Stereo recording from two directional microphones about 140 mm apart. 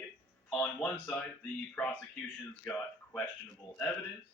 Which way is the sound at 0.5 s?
10° left (ahead or behind).